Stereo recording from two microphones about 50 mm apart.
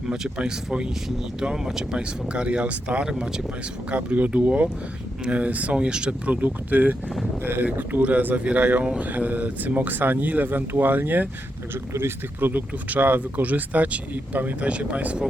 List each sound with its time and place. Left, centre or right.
0.1 s speech: centre
3.9 s speech: right
9.0 s speech: right
11.7 s speech: right